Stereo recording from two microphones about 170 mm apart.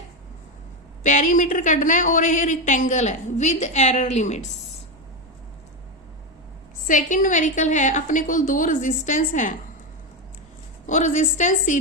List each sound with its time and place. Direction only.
1.0 s a woman's voice: 45° left (ahead or behind)
6.8 s a woman's voice: 50° left (ahead or behind)
10.8 s a woman's voice: 45° left (ahead or behind)